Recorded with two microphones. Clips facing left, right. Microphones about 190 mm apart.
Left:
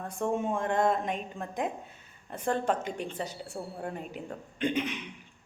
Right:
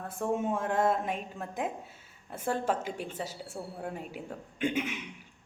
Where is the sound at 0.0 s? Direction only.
5° right (ahead or behind).